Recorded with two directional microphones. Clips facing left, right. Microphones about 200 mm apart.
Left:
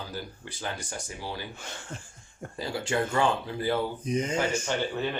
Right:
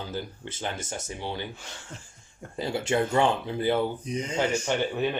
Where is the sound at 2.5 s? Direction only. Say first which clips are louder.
Right 3 dB; 25° right (ahead or behind).